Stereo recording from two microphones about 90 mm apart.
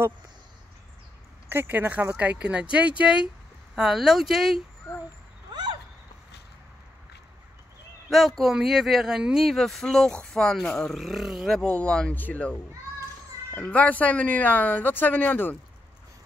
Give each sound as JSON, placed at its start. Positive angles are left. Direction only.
{"t": 1.5, "sound": "speech", "side_deg": -25}
{"t": 5.5, "sound": "a sound", "side_deg": -55}
{"t": 8.1, "sound": "speech", "side_deg": 0}
{"t": 11.6, "sound": "speech", "side_deg": 15}